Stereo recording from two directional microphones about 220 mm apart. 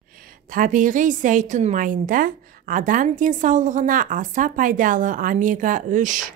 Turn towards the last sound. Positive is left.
turn(degrees=-35)  # may be behind; listen again after turning